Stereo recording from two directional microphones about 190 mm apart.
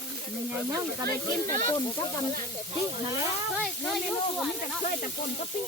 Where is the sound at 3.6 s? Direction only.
Centre (ahead or behind).